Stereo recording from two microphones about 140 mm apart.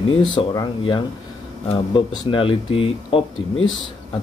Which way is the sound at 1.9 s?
40° left (ahead or behind).